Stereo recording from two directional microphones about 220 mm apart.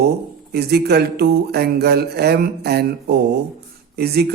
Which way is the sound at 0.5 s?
45° right (ahead or behind).